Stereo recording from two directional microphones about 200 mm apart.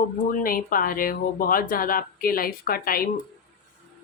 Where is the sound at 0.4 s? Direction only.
45° left (ahead or behind).